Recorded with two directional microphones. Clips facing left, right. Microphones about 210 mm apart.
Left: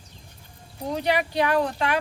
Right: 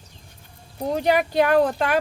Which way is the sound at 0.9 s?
45° right (ahead or behind).